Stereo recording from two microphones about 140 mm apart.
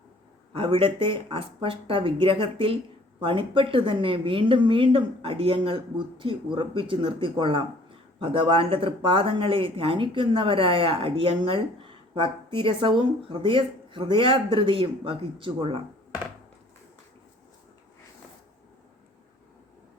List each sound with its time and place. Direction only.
0.5 s speech: 35° right (ahead or behind)